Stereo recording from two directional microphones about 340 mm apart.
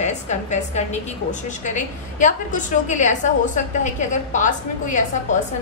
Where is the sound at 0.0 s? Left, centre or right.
Centre.